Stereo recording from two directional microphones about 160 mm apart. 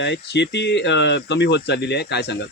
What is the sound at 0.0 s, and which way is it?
Speech, 90° left.